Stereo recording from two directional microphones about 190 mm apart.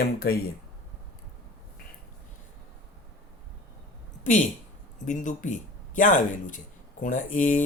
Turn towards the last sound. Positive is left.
turn(degrees=40)  # may be behind; listen again after turning